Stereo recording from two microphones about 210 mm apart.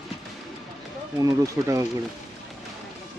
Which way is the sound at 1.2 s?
15° right (ahead or behind).